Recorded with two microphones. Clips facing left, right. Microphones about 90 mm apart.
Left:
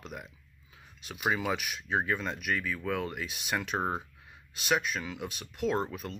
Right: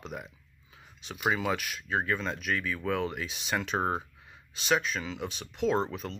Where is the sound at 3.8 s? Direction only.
Centre (ahead or behind).